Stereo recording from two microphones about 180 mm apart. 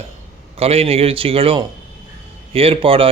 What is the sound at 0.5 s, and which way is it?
A man's voice, 35° right (ahead or behind).